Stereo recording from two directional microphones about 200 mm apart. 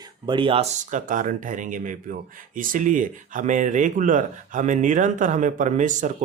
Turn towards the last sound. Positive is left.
turn(degrees=-40)  # may be behind; listen again after turning